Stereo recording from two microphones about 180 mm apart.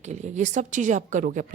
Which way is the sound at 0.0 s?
40° right (ahead or behind).